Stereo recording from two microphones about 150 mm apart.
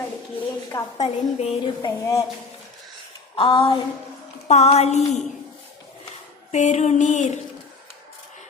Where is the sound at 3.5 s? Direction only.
35° left (ahead or behind).